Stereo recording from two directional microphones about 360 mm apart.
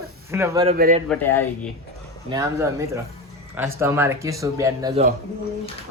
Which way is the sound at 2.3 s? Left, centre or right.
Centre.